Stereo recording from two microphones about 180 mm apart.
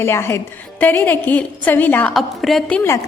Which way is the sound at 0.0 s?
15° left (ahead or behind).